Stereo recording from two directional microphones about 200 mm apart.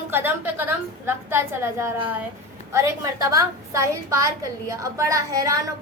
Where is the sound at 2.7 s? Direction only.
15° right (ahead or behind).